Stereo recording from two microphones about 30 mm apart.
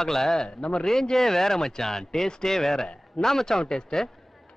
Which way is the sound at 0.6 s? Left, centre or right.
Left.